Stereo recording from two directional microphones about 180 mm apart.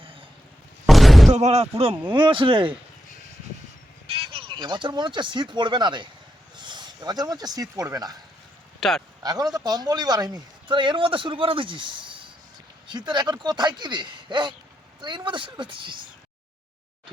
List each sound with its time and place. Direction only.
0.0 s wild animals: 30° right (ahead or behind)
0.9 s a sound: centre (ahead or behind)
1.3 s speech: 40° right (ahead or behind)
4.3 s speech: 30° right (ahead or behind)
8.8 s speech: centre (ahead or behind)
9.2 s speech: 20° right (ahead or behind)